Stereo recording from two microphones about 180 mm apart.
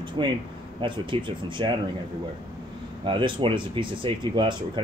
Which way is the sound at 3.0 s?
30° right (ahead or behind).